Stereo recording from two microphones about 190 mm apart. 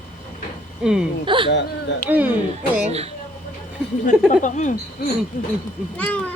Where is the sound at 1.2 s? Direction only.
25° right (ahead or behind).